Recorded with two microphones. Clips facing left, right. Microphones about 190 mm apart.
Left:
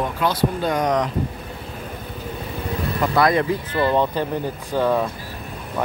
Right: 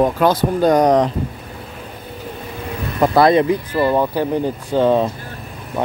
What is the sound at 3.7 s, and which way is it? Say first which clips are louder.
Speech: right 3 dB; 10° right (ahead or behind).